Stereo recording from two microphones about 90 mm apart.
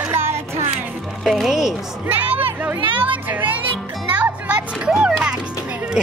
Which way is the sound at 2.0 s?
20° right (ahead or behind).